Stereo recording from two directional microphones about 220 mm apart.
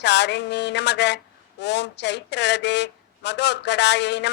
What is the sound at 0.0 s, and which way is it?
Speech, 50° left (ahead or behind).